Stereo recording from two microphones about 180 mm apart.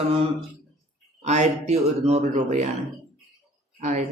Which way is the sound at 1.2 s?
40° right (ahead or behind).